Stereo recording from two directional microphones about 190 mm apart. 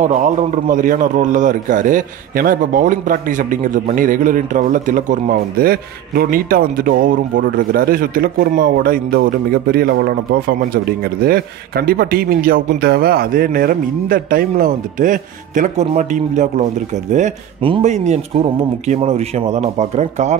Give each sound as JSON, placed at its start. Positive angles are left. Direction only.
{"t": 0.0, "sound": "a man's voice", "side_deg": -40}